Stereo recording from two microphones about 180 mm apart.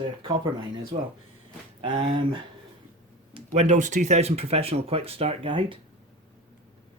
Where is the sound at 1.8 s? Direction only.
30° right (ahead or behind).